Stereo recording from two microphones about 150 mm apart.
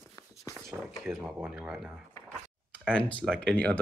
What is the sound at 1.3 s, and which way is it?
Speech, 10° right (ahead or behind).